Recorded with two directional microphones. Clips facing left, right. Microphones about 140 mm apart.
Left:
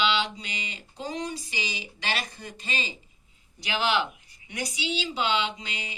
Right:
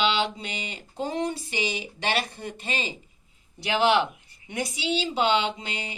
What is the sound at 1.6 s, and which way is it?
Speech, 30° right (ahead or behind).